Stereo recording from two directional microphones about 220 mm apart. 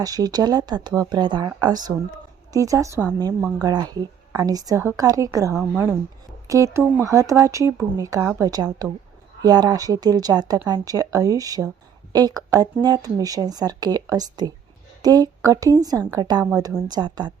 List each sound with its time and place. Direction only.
0.0 s a woman's voice: 15° right (ahead or behind)